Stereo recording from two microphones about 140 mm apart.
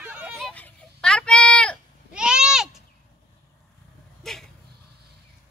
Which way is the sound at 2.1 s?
5° right (ahead or behind).